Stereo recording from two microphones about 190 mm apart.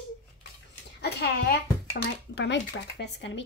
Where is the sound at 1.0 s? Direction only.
55° left (ahead or behind).